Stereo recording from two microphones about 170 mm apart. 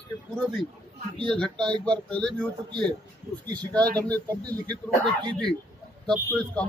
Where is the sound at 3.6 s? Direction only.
10° left (ahead or behind).